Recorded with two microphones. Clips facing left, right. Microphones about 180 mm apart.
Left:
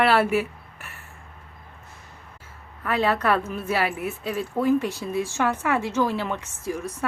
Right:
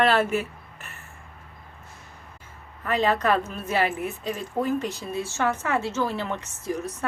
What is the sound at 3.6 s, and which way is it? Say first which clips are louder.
A woman's voice: even; 10° left (ahead or behind).